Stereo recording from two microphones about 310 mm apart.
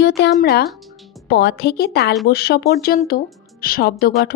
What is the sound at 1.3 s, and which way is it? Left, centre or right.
A woman's voice, left.